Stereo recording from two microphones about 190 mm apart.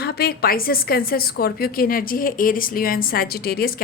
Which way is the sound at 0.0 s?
55° left (ahead or behind).